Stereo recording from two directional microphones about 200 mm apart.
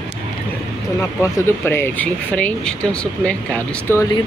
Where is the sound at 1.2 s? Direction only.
10° left (ahead or behind).